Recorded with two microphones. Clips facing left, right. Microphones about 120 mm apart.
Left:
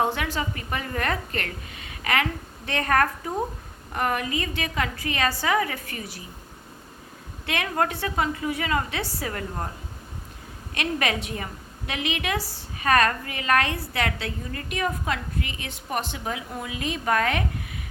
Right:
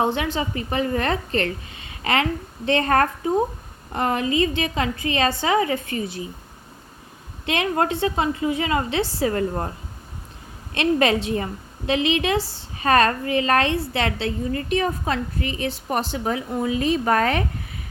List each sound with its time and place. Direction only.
0.0 s a woman's voice: 20° right (ahead or behind)
7.4 s a woman's voice: 25° right (ahead or behind)
10.8 s a woman's voice: 30° right (ahead or behind)